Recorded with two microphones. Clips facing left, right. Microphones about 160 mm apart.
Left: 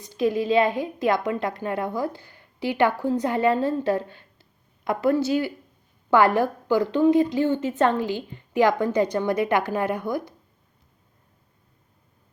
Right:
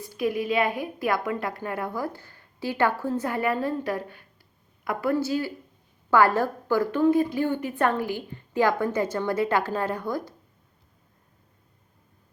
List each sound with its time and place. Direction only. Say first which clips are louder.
0.2 s a woman's voice: left 4 dB; 25° left (ahead or behind)